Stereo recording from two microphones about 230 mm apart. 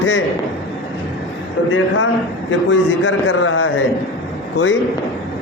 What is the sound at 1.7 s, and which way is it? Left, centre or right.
A man's voice, left.